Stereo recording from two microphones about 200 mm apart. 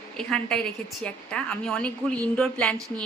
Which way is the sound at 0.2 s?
5° left (ahead or behind).